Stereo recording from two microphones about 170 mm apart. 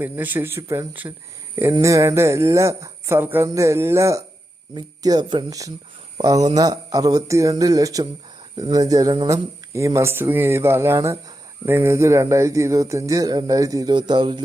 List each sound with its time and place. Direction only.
0.0 s speech: 10° right (ahead or behind)